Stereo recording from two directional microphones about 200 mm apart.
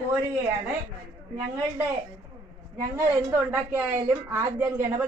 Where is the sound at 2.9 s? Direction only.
10° right (ahead or behind).